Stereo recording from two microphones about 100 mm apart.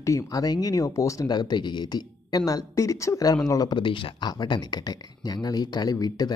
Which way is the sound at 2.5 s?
35° left (ahead or behind).